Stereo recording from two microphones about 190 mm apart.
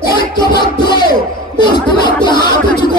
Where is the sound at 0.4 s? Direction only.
25° left (ahead or behind).